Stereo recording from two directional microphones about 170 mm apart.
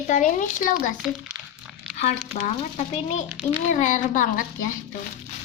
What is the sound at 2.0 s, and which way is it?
Speech, 40° left (ahead or behind).